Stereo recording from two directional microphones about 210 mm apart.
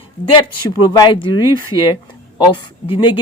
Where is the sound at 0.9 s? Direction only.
20° left (ahead or behind).